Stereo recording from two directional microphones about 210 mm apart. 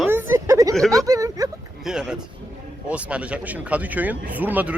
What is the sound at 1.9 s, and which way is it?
A man's voice, 5° right (ahead or behind).